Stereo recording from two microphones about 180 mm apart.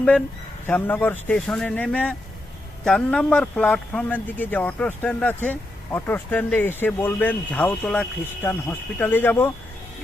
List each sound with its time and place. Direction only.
0.7 s speech: 10° left (ahead or behind)